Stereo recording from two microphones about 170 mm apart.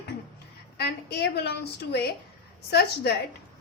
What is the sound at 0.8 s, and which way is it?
A woman's voice, 75° left (ahead or behind).